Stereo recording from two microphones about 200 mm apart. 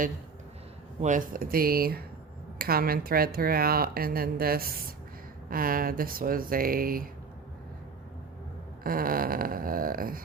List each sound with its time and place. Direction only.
1.0 s a woman's voice: 40° right (ahead or behind)
8.8 s a woman's voice: 45° right (ahead or behind)